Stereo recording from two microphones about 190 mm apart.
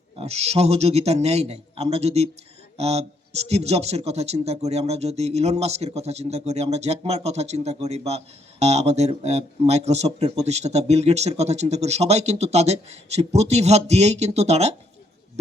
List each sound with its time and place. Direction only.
0.2 s speech: 35° right (ahead or behind)